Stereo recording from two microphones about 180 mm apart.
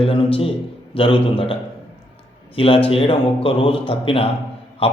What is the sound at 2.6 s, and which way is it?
A man's voice, 30° left (ahead or behind).